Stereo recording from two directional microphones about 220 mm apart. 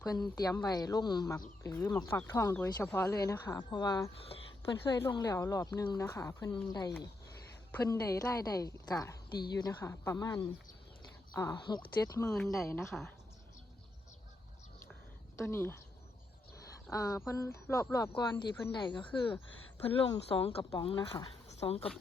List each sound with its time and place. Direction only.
0.3 s speech: 15° left (ahead or behind)
7.7 s speech: 15° left (ahead or behind)
12.3 s speech: centre (ahead or behind)
15.4 s speech: 10° left (ahead or behind)
16.9 s speech: 15° left (ahead or behind)